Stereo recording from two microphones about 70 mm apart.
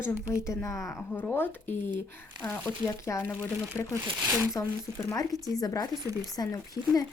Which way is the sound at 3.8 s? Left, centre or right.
Left.